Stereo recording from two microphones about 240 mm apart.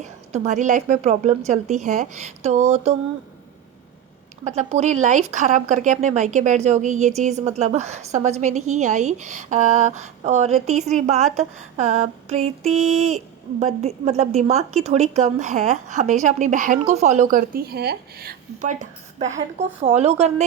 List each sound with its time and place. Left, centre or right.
0.3 s speech: right
4.4 s a woman's voice: right